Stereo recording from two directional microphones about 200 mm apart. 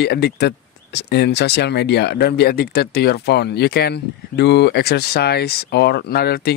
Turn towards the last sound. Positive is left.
turn(degrees=50)  # may be behind; listen again after turning